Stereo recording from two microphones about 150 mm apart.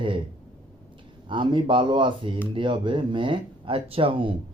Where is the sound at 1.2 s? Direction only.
35° right (ahead or behind).